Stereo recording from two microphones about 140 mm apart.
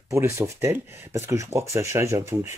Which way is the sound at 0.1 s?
20° right (ahead or behind).